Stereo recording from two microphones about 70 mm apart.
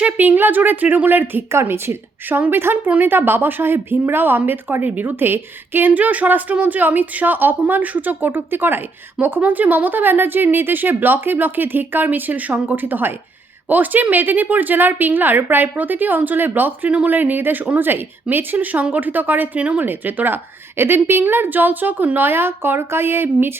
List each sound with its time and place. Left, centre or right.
0.0 s a woman's voice: right
19.8 s a woman's voice: right